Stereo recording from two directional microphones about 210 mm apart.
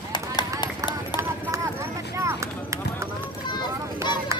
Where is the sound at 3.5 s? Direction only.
20° left (ahead or behind).